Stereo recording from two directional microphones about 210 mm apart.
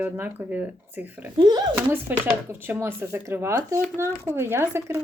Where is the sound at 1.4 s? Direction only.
20° right (ahead or behind).